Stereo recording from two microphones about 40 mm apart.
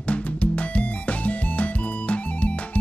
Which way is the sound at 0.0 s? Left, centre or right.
Left.